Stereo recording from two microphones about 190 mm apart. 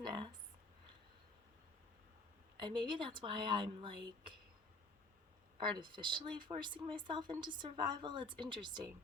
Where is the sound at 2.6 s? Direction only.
25° right (ahead or behind).